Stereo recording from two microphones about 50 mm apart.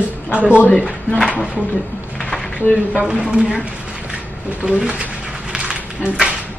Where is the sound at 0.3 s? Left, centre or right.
Right.